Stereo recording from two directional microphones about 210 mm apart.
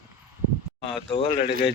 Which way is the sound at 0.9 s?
25° left (ahead or behind).